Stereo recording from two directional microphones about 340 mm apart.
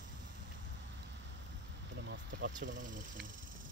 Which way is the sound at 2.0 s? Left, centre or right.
Right.